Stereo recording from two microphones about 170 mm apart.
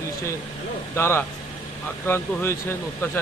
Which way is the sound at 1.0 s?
15° left (ahead or behind).